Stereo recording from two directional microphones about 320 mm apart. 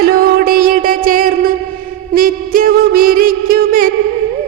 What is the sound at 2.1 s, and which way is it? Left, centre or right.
Music, right.